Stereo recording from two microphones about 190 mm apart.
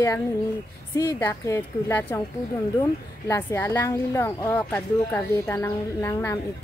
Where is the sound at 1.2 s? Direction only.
10° left (ahead or behind).